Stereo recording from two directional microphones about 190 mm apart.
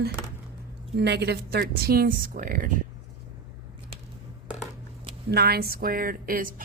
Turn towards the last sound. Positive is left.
turn(degrees=-50)  # may be behind; listen again after turning